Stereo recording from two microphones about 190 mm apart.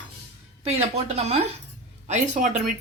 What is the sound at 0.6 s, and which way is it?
Speech, 35° right (ahead or behind).